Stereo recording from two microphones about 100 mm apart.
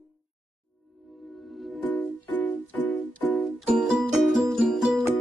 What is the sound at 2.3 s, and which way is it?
Music, 15° left (ahead or behind).